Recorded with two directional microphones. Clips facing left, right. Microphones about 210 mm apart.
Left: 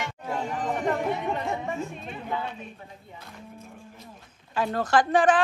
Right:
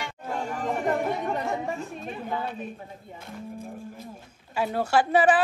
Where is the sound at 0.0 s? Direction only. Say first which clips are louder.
Left 1 dB; centre (ahead or behind).